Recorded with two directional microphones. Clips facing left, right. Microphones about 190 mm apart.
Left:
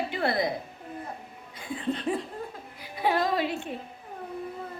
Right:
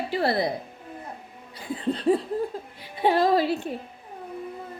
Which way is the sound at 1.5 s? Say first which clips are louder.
Right 3 dB; 35° right (ahead or behind).